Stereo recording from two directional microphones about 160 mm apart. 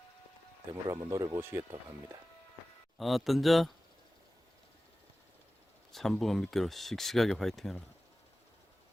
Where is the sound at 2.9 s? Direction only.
Centre (ahead or behind).